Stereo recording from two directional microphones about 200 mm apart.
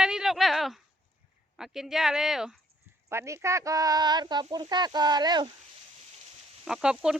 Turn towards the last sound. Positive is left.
turn(degrees=-5)  # may be behind; listen again after turning